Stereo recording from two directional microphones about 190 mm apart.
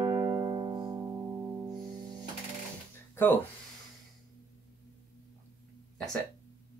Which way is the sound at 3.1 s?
10° left (ahead or behind).